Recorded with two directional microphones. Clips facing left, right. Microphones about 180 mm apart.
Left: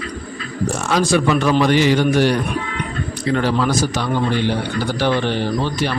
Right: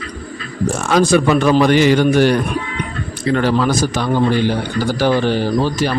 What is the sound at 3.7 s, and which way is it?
A man's voice, 45° right (ahead or behind).